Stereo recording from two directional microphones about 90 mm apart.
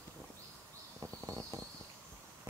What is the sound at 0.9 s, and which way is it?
Bird flight, 30° right (ahead or behind).